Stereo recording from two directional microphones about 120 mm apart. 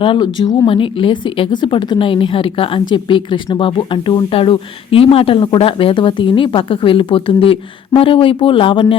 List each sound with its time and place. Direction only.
0.0 s speech: 40° left (ahead or behind)